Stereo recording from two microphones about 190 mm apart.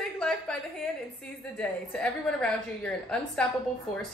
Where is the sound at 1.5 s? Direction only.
5° left (ahead or behind).